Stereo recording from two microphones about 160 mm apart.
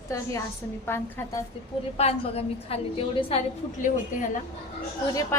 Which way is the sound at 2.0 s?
40° left (ahead or behind).